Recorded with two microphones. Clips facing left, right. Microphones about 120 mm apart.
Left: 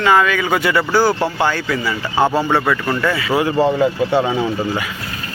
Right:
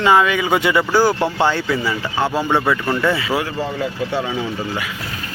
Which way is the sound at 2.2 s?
15° left (ahead or behind).